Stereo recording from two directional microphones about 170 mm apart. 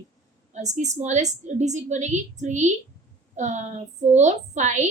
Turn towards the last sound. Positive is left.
turn(degrees=-45)  # may be behind; listen again after turning